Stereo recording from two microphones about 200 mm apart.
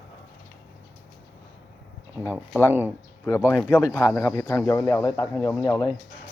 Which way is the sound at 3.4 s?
15° left (ahead or behind).